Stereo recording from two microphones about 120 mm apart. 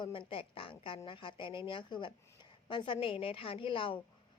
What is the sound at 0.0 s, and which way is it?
A woman's voice, 45° left (ahead or behind).